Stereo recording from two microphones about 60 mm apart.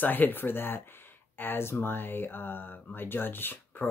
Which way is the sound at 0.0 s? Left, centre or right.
Left.